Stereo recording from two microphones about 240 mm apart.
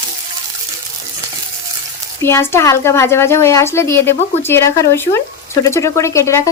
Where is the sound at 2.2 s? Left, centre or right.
Centre.